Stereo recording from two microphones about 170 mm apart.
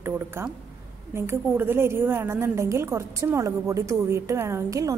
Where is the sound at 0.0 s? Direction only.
15° right (ahead or behind).